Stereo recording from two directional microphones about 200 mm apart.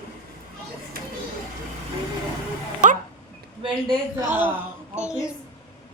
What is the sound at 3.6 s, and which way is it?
Speech, 20° right (ahead or behind).